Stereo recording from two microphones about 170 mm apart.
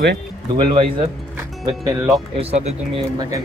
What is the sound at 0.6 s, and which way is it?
Speech, 30° right (ahead or behind).